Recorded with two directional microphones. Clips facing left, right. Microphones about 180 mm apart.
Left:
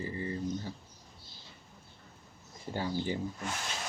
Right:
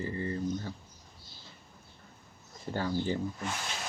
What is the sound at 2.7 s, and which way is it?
Speech, 15° left (ahead or behind).